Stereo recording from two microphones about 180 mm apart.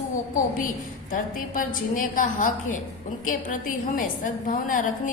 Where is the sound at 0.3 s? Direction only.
50° left (ahead or behind).